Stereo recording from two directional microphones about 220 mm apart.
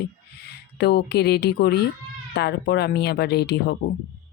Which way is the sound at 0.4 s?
45° left (ahead or behind).